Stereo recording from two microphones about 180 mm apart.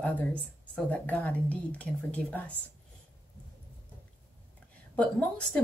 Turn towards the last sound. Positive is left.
turn(degrees=5)  # may be behind; listen again after turning